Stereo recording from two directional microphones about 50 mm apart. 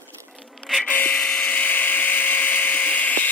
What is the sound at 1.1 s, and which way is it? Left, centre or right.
Tools, centre.